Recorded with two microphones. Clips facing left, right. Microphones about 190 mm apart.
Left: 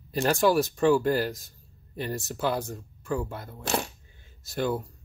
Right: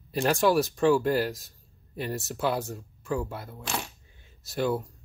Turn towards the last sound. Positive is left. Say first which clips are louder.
# right 1 dB
turn(degrees=0)  # may be behind; listen again after turning